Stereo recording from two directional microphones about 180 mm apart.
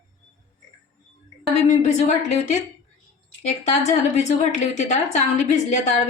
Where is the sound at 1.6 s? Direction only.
40° left (ahead or behind).